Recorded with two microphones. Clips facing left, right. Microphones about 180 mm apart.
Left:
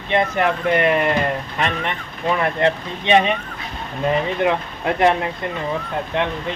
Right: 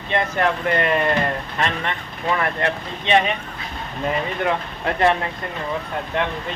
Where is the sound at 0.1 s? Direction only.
15° left (ahead or behind).